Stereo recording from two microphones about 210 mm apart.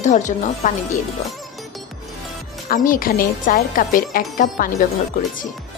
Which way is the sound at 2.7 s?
40° left (ahead or behind).